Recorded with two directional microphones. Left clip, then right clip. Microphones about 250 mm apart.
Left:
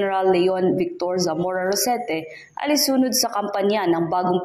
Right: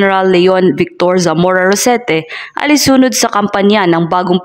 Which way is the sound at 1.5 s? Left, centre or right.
Right.